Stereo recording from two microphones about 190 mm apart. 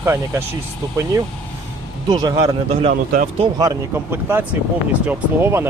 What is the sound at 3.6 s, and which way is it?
Speech, 15° right (ahead or behind).